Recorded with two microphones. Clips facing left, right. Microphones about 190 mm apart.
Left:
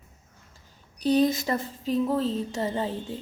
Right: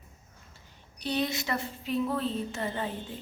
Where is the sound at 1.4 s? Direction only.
40° left (ahead or behind).